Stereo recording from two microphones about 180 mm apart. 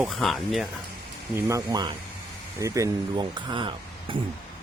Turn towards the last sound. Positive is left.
turn(degrees=-25)  # may be behind; listen again after turning